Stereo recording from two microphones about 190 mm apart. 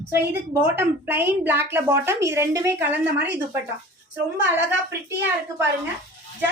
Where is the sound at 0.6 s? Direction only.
10° right (ahead or behind).